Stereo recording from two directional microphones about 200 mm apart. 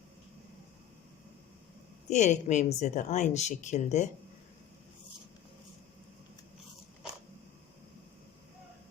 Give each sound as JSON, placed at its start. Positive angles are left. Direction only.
{"t": 2.0, "sound": "a woman's voice", "side_deg": 35}